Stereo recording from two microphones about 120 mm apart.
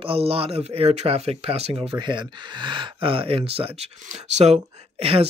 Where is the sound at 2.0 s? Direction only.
40° right (ahead or behind).